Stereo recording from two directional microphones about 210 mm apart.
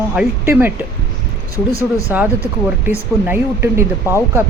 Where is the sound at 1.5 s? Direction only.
15° left (ahead or behind).